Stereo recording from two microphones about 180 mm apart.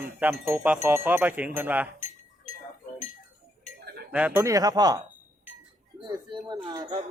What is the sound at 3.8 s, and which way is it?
Chink, 60° right (ahead or behind).